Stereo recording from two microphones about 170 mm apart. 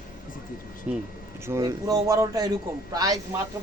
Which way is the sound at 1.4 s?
20° right (ahead or behind).